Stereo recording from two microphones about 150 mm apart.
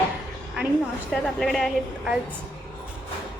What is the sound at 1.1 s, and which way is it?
A woman's voice, centre (ahead or behind).